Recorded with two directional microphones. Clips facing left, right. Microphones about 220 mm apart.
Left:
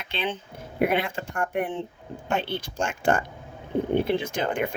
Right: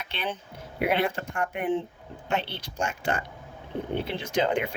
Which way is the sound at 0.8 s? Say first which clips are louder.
Left 3 dB; 50° left (ahead or behind).